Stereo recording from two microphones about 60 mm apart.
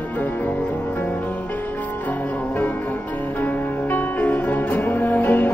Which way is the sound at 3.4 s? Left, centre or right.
Left.